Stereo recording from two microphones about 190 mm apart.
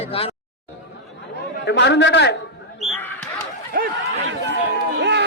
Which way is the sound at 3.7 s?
50° right (ahead or behind).